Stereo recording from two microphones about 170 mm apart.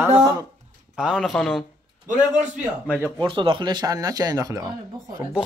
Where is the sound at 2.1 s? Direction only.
45° right (ahead or behind).